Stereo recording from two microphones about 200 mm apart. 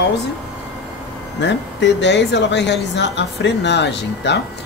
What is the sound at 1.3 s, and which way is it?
Speech, 60° left (ahead or behind).